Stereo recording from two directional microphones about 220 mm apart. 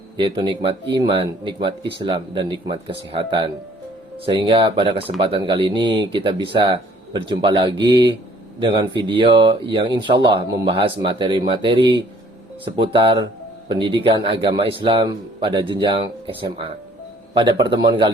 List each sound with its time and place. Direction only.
0.2 s speech: 20° right (ahead or behind)